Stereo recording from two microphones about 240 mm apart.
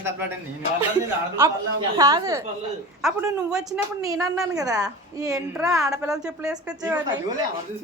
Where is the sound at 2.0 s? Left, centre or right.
Centre.